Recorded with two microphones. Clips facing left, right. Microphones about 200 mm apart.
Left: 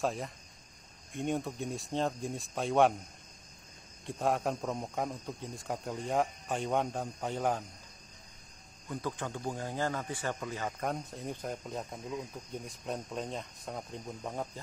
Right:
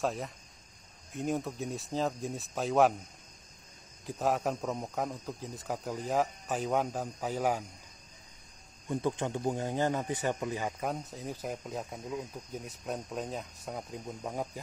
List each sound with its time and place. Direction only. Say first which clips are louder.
0.0 s speech: right 1 dB; centre (ahead or behind)
4.0 s speech: right 1 dB; centre (ahead or behind)
8.8 s speech: right 5 dB; 25° right (ahead or behind)
10.9 s speech: even; centre (ahead or behind)